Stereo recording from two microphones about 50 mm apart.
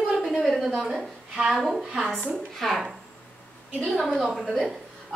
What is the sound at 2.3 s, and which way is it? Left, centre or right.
Speech, centre.